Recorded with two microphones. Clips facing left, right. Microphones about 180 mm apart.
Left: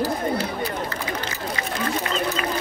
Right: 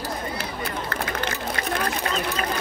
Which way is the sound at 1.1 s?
55° right (ahead or behind).